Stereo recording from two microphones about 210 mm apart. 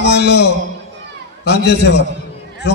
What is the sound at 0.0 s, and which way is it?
Speech, 55° left (ahead or behind).